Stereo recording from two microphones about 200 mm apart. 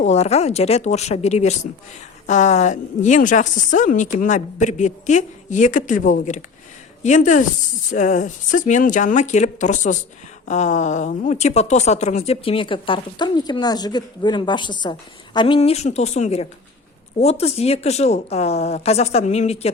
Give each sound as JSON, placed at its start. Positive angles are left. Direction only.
{"t": 0.0, "sound": "a woman's voice", "side_deg": 35}